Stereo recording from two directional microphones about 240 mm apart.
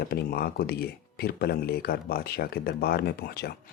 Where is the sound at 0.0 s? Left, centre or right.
Left.